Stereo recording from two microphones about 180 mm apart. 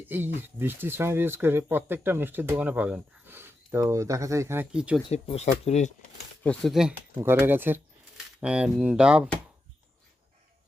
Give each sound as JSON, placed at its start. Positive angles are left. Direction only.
{"t": 0.0, "sound": "speech", "side_deg": -10}
{"t": 5.0, "sound": "speech", "side_deg": 30}
{"t": 6.4, "sound": "speech", "side_deg": 5}
{"t": 7.2, "sound": "speech", "side_deg": -10}